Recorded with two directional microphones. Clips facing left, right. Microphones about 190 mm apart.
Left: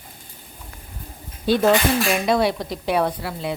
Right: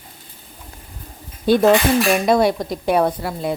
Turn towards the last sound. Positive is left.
turn(degrees=-45)  # may be behind; listen again after turning